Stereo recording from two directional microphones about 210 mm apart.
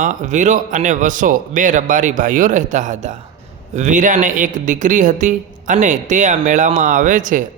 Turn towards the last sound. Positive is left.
turn(degrees=-40)  # may be behind; listen again after turning